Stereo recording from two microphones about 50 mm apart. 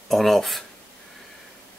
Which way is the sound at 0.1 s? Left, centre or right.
Centre.